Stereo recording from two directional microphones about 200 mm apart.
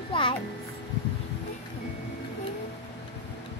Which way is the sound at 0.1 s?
25° left (ahead or behind).